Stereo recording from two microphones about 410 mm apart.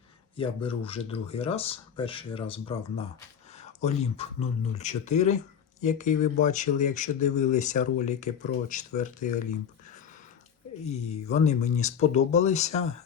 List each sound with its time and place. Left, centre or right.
0.3 s speech: centre
10.8 s speech: centre